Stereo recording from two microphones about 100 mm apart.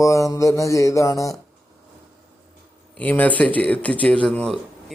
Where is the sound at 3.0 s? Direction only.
15° left (ahead or behind).